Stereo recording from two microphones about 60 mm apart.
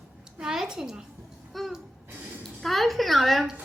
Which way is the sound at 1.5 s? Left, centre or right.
Centre.